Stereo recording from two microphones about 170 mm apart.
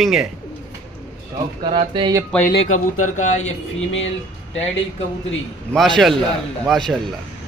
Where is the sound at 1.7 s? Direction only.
30° right (ahead or behind).